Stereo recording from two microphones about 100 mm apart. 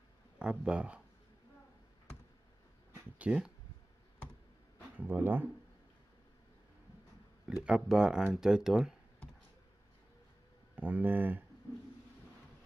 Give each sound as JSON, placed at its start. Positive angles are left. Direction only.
{"t": 0.4, "sound": "speech", "side_deg": -10}
{"t": 3.2, "sound": "speech", "side_deg": -10}
{"t": 4.9, "sound": "speech", "side_deg": -20}
{"t": 7.4, "sound": "speech", "side_deg": -10}
{"t": 10.8, "sound": "speech", "side_deg": -15}